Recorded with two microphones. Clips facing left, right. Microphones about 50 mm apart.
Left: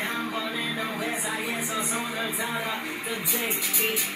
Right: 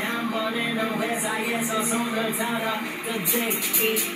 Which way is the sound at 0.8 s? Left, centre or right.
Right.